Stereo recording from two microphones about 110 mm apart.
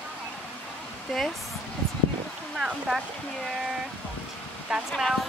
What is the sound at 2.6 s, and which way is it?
Speech, 5° right (ahead or behind).